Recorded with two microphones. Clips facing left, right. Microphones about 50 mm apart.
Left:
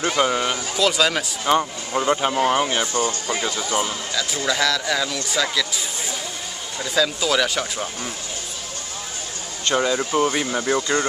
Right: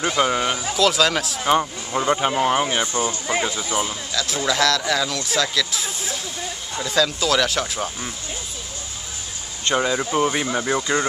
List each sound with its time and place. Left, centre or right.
0.1 s speech: centre
2.8 s speech: right
3.8 s speech: centre
9.8 s speech: centre